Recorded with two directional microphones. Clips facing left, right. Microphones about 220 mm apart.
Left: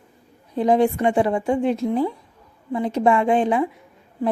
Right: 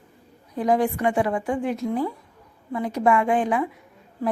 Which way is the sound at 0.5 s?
25° left (ahead or behind).